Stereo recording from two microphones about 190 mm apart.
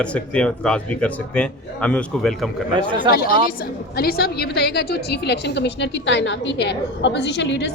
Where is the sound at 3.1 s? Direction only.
50° left (ahead or behind).